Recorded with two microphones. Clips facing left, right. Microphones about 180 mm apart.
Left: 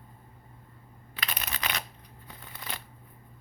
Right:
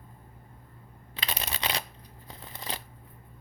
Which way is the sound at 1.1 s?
30° right (ahead or behind).